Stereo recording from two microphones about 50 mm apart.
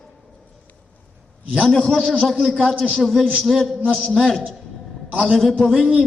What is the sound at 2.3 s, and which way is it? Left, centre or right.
Speech, centre.